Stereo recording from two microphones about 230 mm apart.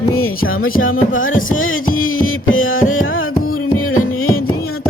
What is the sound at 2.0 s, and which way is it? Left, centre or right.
Music, left.